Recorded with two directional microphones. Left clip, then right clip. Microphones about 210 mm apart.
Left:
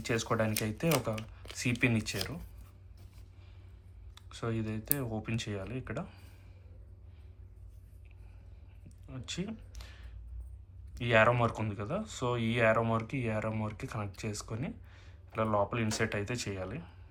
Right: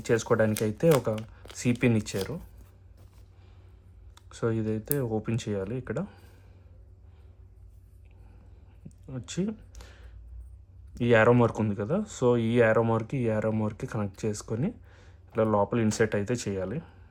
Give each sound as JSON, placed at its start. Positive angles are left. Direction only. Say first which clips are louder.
{"t": 0.0, "sound": "speech", "louder": "right 7 dB", "side_deg": -55}
{"t": 4.1, "sound": "speech", "louder": "right 8 dB", "side_deg": -60}
{"t": 8.9, "sound": "computer keyboard", "louder": "right 2 dB", "side_deg": -55}
{"t": 10.9, "sound": "speech", "louder": "right 5 dB", "side_deg": -60}